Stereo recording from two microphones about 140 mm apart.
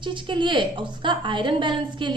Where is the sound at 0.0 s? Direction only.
35° right (ahead or behind).